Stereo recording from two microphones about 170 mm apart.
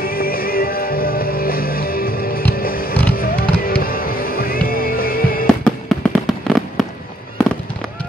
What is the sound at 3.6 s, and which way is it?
Music, 60° left (ahead or behind).